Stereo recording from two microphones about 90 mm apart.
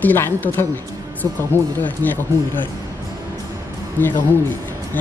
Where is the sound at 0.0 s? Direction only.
20° left (ahead or behind).